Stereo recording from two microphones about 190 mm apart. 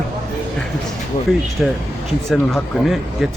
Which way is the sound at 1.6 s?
Centre (ahead or behind).